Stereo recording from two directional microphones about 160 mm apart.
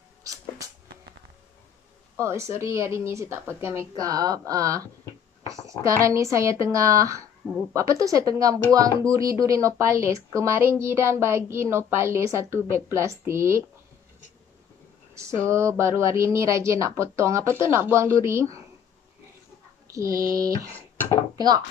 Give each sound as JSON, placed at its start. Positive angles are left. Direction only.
{"t": 0.2, "sound": "a sound", "side_deg": -20}
{"t": 2.1, "sound": "a woman's voice", "side_deg": -15}
{"t": 5.4, "sound": "a sound", "side_deg": -20}
{"t": 6.0, "sound": "a woman's voice", "side_deg": -20}
{"t": 15.1, "sound": "a woman's voice", "side_deg": -20}
{"t": 19.9, "sound": "speech", "side_deg": -20}
{"t": 20.7, "sound": "speech", "side_deg": 10}